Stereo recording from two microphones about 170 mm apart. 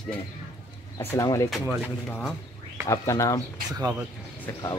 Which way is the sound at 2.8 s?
20° left (ahead or behind).